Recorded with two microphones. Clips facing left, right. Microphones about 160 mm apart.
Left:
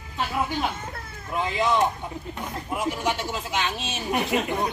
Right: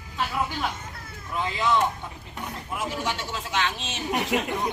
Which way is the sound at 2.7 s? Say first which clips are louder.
Left 4 dB; 15° left (ahead or behind).